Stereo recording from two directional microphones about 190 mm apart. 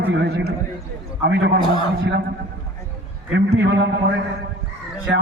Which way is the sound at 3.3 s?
65° right (ahead or behind).